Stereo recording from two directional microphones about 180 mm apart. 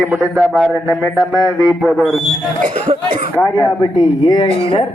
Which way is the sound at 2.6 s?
45° right (ahead or behind).